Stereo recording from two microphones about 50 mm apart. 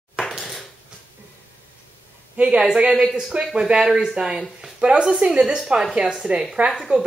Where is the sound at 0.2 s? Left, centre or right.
Centre.